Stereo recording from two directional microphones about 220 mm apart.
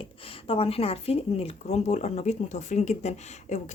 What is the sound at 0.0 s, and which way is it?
Speech, 25° left (ahead or behind).